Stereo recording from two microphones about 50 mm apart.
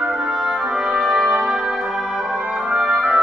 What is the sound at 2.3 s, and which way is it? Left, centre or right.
Music, right.